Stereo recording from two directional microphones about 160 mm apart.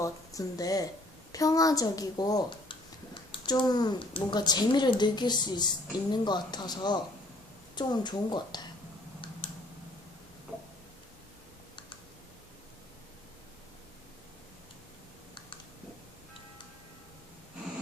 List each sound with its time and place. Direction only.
0.0 s speech: 20° left (ahead or behind)